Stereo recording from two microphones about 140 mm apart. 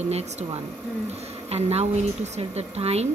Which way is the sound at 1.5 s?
50° right (ahead or behind).